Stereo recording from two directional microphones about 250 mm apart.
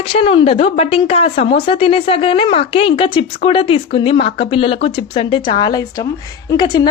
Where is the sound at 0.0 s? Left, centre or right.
Left.